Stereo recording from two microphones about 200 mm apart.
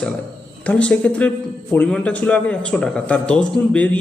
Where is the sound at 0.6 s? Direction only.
5° left (ahead or behind).